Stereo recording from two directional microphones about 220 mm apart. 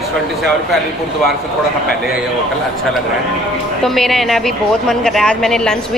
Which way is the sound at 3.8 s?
Centre (ahead or behind).